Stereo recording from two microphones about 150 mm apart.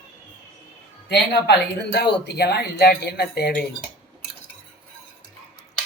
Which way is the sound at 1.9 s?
90° left.